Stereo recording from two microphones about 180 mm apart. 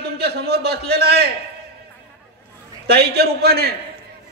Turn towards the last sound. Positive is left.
turn(degrees=-60)  # may be behind; listen again after turning